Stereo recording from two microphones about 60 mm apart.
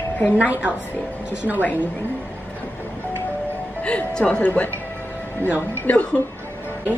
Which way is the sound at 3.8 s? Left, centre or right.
Centre.